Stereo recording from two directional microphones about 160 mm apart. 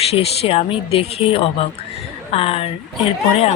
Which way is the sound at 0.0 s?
40° left (ahead or behind).